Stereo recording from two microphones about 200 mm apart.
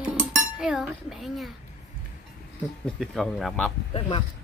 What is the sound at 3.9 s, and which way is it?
Speech, 25° left (ahead or behind).